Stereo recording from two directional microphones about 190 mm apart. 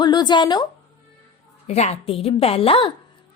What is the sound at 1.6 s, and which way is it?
A woman's voice, 35° left (ahead or behind).